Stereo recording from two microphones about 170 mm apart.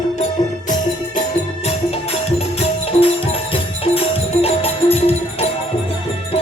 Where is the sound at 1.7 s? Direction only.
35° left (ahead or behind).